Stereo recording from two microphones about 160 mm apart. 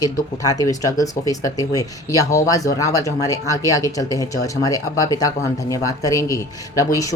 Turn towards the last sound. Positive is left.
turn(degrees=20)  # may be behind; listen again after turning